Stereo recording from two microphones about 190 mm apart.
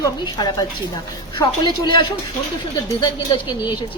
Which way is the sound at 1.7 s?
25° left (ahead or behind).